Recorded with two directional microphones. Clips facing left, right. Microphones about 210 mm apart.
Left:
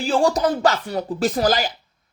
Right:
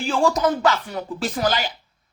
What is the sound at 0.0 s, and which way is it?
Speech, 35° left (ahead or behind).